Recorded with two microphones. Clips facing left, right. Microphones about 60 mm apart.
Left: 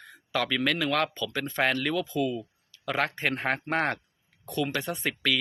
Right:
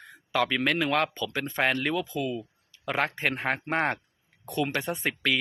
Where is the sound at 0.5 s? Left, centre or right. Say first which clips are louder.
Left 1 dB; centre.